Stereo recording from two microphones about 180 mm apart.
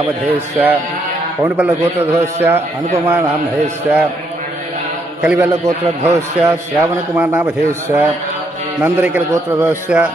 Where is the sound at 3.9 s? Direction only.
5° right (ahead or behind).